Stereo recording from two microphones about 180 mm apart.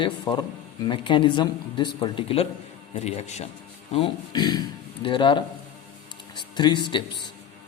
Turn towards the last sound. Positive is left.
turn(degrees=25)  # may be behind; listen again after turning